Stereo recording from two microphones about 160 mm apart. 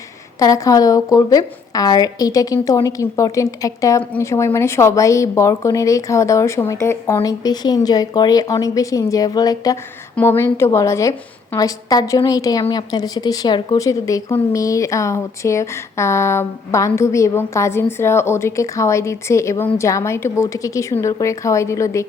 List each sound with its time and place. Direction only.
0.3 s a woman's voice: 20° left (ahead or behind)